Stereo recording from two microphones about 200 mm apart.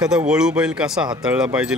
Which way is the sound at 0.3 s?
5° right (ahead or behind).